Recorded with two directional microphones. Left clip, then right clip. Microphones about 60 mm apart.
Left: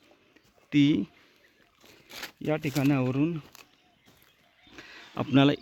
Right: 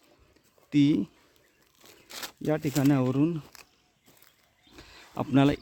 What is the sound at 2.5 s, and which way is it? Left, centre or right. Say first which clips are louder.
Speech: right 1 dB; right.